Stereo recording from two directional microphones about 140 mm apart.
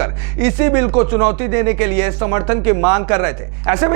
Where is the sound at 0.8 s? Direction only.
20° right (ahead or behind).